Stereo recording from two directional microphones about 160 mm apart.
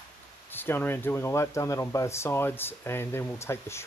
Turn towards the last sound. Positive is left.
turn(degrees=15)  # may be behind; listen again after turning